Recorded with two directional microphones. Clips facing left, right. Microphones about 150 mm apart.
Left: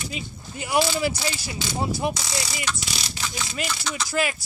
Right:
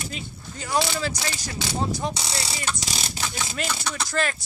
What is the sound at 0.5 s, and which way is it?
A man's voice, 15° left (ahead or behind).